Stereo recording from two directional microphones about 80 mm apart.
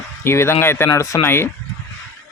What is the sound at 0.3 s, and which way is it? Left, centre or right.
Speech, left.